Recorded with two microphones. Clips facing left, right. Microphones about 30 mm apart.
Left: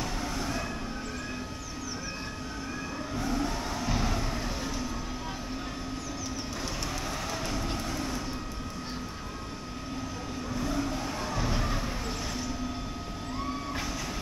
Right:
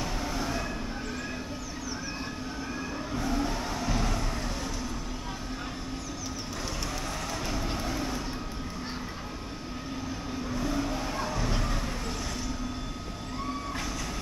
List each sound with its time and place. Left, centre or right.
0.0 s vehicle: centre
3.2 s vehicle: centre
7.5 s vehicle: centre
10.5 s vehicle: centre